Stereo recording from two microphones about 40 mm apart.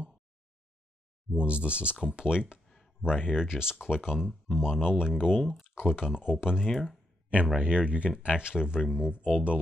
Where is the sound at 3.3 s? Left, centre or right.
Centre.